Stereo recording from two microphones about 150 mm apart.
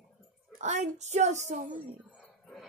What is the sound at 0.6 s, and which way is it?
Speech, 50° right (ahead or behind).